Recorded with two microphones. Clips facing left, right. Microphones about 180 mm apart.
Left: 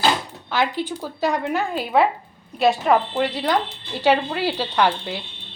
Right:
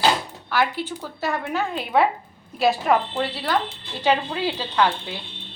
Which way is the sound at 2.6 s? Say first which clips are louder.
Left 2 dB; centre (ahead or behind).